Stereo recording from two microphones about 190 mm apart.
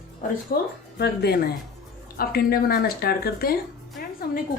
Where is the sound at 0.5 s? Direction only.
50° left (ahead or behind).